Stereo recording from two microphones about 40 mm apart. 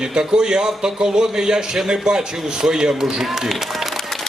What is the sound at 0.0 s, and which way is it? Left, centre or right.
A man's voice, right.